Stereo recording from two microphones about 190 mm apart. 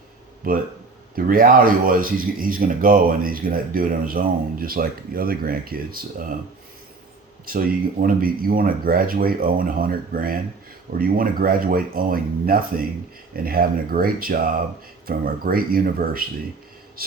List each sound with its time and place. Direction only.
0.4 s speech: 50° right (ahead or behind)
7.4 s speech: 50° right (ahead or behind)